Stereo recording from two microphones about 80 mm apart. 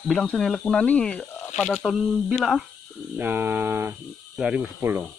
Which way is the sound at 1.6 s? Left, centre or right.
Centre.